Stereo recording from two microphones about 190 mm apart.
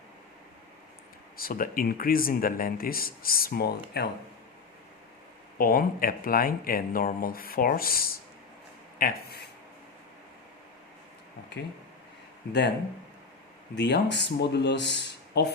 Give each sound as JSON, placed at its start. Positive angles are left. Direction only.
{"t": 1.4, "sound": "speech", "side_deg": 50}
{"t": 5.5, "sound": "speech", "side_deg": 50}
{"t": 13.7, "sound": "speech", "side_deg": 60}